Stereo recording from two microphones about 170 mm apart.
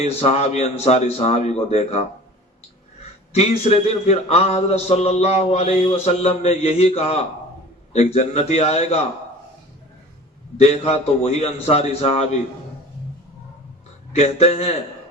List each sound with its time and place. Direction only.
0.0 s a man's voice: 40° left (ahead or behind)
3.3 s a man's voice: 40° left (ahead or behind)
10.6 s a man's voice: 40° left (ahead or behind)
14.2 s a man's voice: 40° left (ahead or behind)